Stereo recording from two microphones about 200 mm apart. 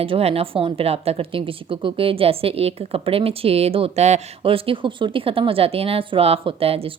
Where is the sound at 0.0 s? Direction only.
30° right (ahead or behind).